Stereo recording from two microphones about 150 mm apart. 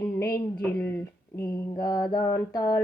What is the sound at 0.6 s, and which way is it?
Speech, 15° left (ahead or behind).